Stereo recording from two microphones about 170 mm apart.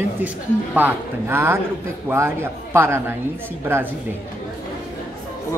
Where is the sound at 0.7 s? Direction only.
10° right (ahead or behind).